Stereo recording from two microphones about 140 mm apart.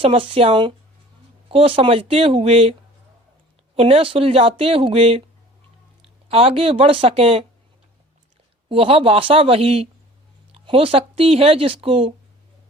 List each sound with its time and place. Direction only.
0.0 s speech: 40° right (ahead or behind)
3.8 s speech: 40° right (ahead or behind)
6.2 s speech: 45° right (ahead or behind)
8.7 s speech: 40° right (ahead or behind)